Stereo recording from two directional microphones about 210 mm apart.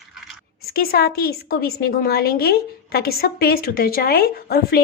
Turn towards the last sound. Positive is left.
turn(degrees=45)  # may be behind; listen again after turning